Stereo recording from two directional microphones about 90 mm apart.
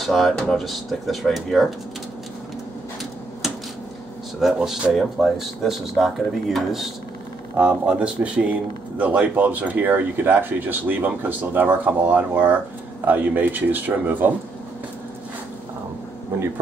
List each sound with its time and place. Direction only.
0.0 s speech: centre (ahead or behind)
4.4 s speech: 5° right (ahead or behind); by 14.3 s 20° right (ahead or behind)